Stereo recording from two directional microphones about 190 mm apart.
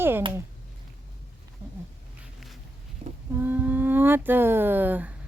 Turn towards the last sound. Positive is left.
turn(degrees=-10)  # may be behind; listen again after turning